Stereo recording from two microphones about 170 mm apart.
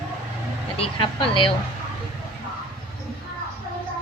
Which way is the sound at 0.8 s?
30° left (ahead or behind).